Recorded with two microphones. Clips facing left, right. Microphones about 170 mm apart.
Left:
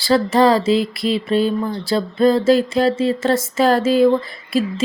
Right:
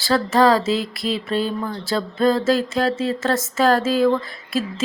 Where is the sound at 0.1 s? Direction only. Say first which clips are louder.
Left 4 dB; 5° left (ahead or behind).